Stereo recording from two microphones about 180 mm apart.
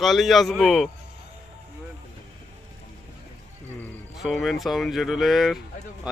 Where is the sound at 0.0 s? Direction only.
Centre (ahead or behind).